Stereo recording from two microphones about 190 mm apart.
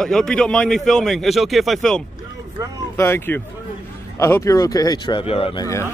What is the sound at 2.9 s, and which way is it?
Speech, 15° left (ahead or behind).